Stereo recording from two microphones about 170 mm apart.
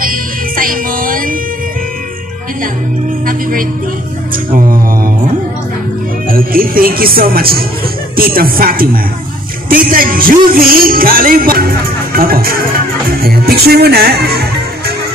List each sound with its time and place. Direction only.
0.0 s music: 55° right (ahead or behind)
4.5 s music: 55° right (ahead or behind)
6.3 s music: 60° right (ahead or behind)